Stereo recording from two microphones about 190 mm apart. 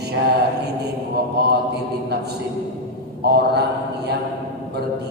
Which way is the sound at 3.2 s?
60° right (ahead or behind).